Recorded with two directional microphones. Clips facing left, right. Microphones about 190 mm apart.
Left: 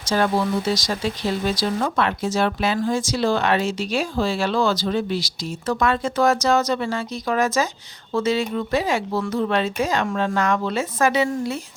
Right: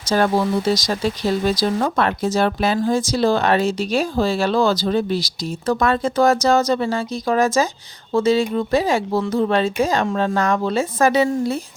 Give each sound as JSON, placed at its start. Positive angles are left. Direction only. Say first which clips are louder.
{"t": 0.1, "sound": "speech", "louder": "right 3 dB", "side_deg": -45}